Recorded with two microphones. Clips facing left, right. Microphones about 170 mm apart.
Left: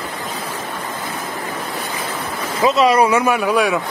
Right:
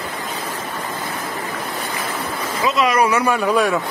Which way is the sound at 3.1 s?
10° left (ahead or behind).